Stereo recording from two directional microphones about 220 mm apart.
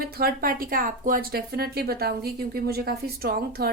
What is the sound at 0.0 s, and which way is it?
Speech, 45° right (ahead or behind).